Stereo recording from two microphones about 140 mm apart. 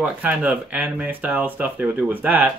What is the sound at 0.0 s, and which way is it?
Speech, 10° right (ahead or behind).